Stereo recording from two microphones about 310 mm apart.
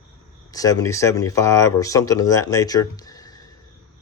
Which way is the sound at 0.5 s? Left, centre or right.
Centre.